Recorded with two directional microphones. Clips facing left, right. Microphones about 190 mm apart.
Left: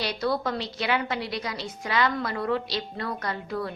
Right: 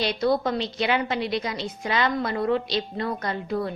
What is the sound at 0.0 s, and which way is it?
A woman's voice, 20° right (ahead or behind).